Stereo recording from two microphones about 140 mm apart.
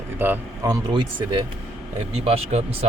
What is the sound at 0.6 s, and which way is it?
Speech, 30° right (ahead or behind).